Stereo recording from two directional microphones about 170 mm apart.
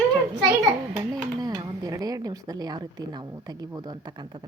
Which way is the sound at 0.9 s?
20° right (ahead or behind).